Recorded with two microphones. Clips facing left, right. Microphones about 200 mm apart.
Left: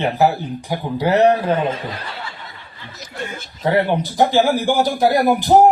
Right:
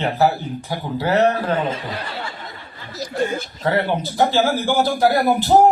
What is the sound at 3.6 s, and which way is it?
A man's voice, 15° left (ahead or behind).